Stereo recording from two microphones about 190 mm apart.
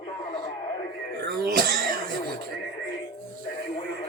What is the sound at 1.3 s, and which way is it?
Cough, 55° right (ahead or behind).